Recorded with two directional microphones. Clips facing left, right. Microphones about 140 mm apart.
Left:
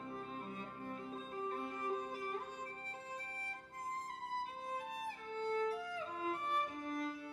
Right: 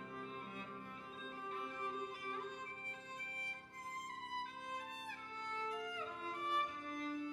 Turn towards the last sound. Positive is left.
turn(degrees=35)  # may be behind; listen again after turning